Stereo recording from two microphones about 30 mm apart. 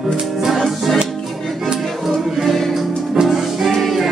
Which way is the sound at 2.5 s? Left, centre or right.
Centre.